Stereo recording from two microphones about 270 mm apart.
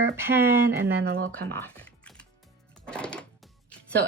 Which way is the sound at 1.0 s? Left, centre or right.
Right.